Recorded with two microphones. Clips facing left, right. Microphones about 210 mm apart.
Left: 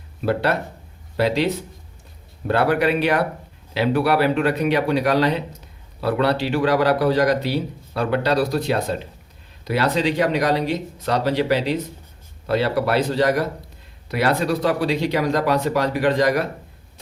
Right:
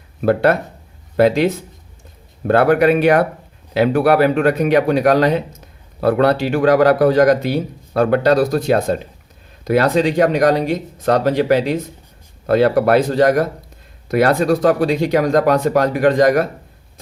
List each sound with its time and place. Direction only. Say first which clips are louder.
0.2 s speech: right 6 dB; 50° right (ahead or behind)